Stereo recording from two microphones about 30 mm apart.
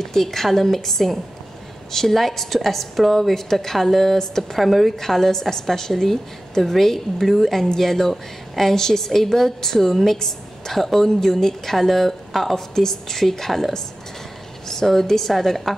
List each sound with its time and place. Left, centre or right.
0.0 s a woman's voice: centre
4.6 s speech: centre
5.0 s a woman's voice: centre